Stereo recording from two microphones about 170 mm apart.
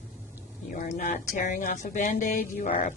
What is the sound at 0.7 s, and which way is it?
Speech, 50° left (ahead or behind).